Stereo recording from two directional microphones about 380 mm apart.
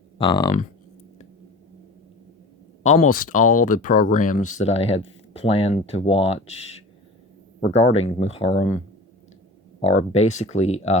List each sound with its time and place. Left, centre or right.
0.2 s speech: centre
2.8 s speech: centre
7.6 s speech: centre
9.8 s speech: centre